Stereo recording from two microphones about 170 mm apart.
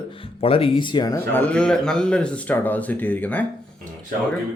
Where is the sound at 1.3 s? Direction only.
10° left (ahead or behind).